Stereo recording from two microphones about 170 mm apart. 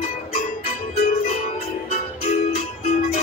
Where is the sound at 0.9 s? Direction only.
40° left (ahead or behind).